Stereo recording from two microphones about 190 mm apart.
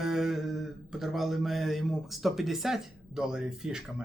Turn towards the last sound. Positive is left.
turn(degrees=-5)  # may be behind; listen again after turning